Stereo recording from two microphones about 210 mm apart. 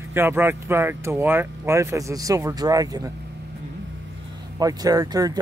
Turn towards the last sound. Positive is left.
turn(degrees=-20)  # may be behind; listen again after turning